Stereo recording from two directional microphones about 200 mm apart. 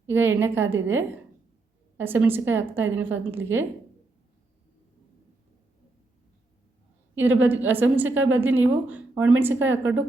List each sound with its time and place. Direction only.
0.1 s a woman's voice: 10° right (ahead or behind)
7.2 s a woman's voice: 10° right (ahead or behind)